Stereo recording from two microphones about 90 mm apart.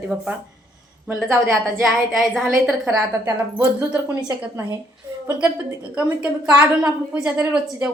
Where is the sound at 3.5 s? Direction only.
20° right (ahead or behind).